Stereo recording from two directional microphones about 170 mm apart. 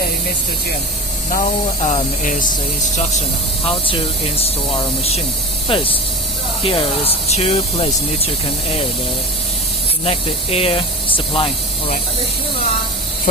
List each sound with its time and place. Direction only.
1.3 s speech: 45° left (ahead or behind)
3.7 s speech: 30° left (ahead or behind)
10.1 s speech: 35° left (ahead or behind)
13.3 s speech: 50° left (ahead or behind)